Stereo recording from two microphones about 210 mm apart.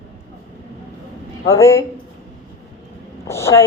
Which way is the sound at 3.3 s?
10° left (ahead or behind).